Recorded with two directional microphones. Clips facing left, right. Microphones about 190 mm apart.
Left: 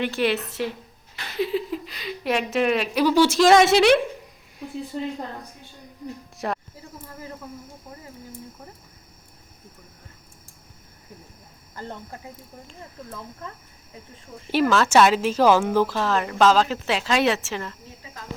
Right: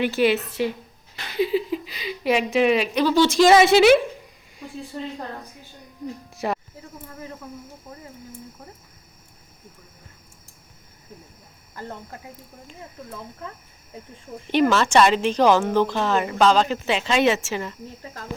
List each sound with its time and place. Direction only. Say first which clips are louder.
0.0 s a woman's voice: right 3 dB; centre (ahead or behind)
4.9 s a woman's voice: left 3 dB; 15° left (ahead or behind)
6.3 s a sound: right 2 dB; centre (ahead or behind)
14.5 s speech: right 1 dB; centre (ahead or behind)